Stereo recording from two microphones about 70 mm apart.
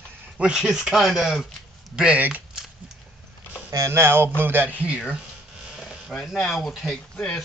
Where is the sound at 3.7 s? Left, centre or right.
Right.